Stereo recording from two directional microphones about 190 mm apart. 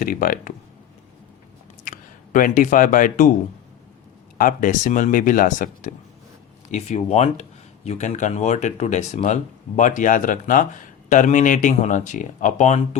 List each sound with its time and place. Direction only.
0.0 s speech: 45° left (ahead or behind)
1.8 s speech: 45° left (ahead or behind)
4.4 s speech: 45° left (ahead or behind)